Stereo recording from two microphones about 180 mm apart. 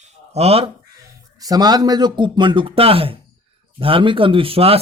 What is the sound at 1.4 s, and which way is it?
Speech, 20° right (ahead or behind).